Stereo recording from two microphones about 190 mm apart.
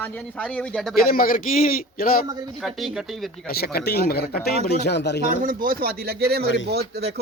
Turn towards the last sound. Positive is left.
turn(degrees=-60)  # may be behind; listen again after turning